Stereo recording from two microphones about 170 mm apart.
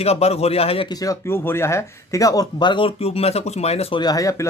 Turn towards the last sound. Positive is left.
turn(degrees=20)  # may be behind; listen again after turning